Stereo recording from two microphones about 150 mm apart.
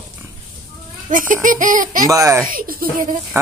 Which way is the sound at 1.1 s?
60° right (ahead or behind).